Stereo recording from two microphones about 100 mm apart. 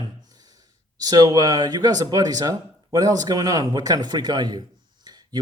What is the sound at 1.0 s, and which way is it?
Speech, 40° right (ahead or behind).